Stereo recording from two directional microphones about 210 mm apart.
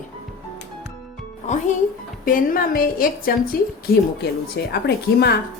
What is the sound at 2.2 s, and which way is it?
A woman's voice, 40° left (ahead or behind).